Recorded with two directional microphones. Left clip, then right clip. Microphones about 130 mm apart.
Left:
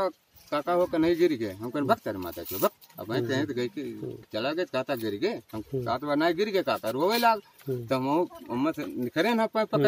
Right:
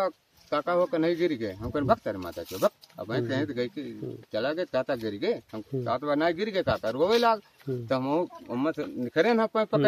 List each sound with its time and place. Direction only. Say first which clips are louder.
0.0 s speech: even; 20° right (ahead or behind)